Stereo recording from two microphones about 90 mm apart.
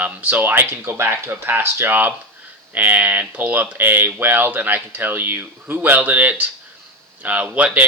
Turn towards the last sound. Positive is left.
turn(degrees=-15)  # may be behind; listen again after turning